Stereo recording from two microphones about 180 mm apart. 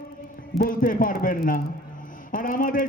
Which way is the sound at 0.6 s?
50° left (ahead or behind).